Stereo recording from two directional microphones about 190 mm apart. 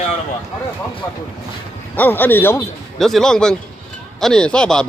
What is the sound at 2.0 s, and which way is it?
A man's voice, 10° left (ahead or behind).